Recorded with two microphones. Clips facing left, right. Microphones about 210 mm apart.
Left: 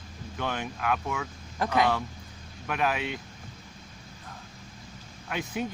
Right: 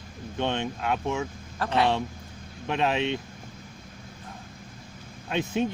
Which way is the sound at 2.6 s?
25° right (ahead or behind).